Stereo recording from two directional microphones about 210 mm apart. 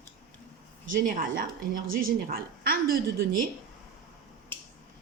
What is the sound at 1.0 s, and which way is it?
A woman's voice, 40° right (ahead or behind).